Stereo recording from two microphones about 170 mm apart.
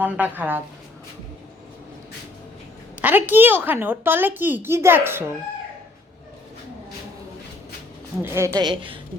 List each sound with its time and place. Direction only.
0.0 s a child's voice: 10° right (ahead or behind)
3.0 s a child's voice: 10° right (ahead or behind)
8.2 s a child's voice: 15° right (ahead or behind)
8.5 s a woman's voice: 30° right (ahead or behind)